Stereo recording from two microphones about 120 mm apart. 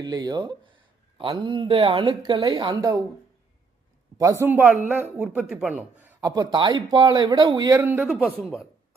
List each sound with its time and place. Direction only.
0.0 s speech: 35° right (ahead or behind)
2.0 s speech: 35° right (ahead or behind)
4.2 s speech: 25° right (ahead or behind)
4.5 s speech: 15° right (ahead or behind)
6.2 s speech: 30° right (ahead or behind)
7.8 s speech: 20° right (ahead or behind)
8.0 s a man's voice: centre (ahead or behind)